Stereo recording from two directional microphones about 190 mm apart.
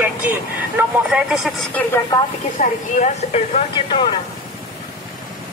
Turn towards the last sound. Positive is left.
turn(degrees=30)  # may be behind; listen again after turning